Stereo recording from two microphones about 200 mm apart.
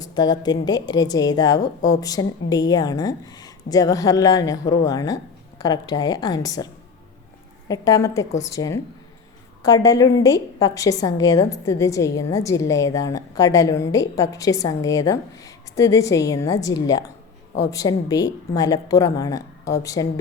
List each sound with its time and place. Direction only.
0.0 s a woman's voice: 20° left (ahead or behind)
7.7 s a woman's voice: 15° left (ahead or behind)